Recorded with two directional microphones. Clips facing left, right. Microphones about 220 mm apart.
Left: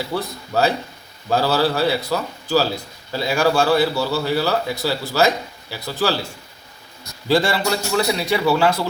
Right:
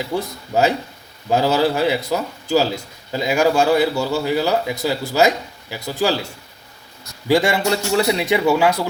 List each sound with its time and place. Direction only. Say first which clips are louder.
0.1 s a man's voice: right 2 dB; 20° right (ahead or behind)
7.3 s a man's voice: right 2 dB; 15° right (ahead or behind)